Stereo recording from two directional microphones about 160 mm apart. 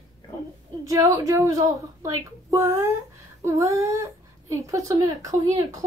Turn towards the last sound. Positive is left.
turn(degrees=-20)  # may be behind; listen again after turning